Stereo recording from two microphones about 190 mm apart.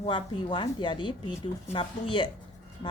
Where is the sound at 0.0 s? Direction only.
25° left (ahead or behind).